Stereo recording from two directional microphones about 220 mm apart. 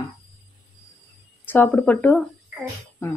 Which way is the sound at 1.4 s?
10° left (ahead or behind).